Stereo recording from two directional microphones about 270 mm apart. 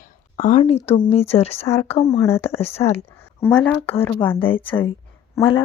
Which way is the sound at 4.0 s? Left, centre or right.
Centre.